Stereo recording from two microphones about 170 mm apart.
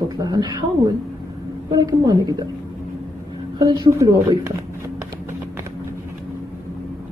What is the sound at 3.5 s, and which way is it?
A woman's voice, 25° right (ahead or behind).